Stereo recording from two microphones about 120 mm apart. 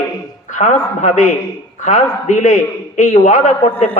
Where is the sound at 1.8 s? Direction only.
90° left.